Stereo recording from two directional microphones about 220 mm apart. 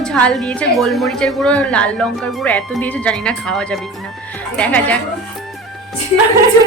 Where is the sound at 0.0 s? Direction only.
5° left (ahead or behind).